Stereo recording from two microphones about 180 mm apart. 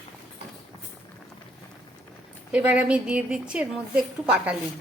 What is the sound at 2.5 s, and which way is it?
A woman's voice, 5° right (ahead or behind).